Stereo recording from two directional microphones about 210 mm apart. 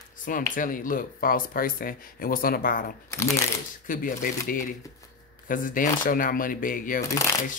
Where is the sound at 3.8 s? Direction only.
40° left (ahead or behind).